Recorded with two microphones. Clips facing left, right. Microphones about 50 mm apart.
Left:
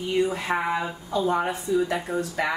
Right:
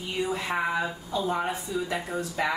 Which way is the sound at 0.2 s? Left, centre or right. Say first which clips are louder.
Left 1 dB; left.